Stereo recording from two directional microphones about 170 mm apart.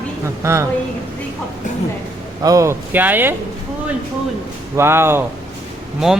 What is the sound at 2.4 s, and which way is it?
Speech, 20° right (ahead or behind).